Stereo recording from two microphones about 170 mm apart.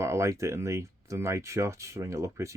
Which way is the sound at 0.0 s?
15° right (ahead or behind).